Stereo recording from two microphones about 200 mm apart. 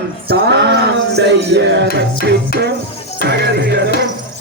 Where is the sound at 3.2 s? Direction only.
55° right (ahead or behind).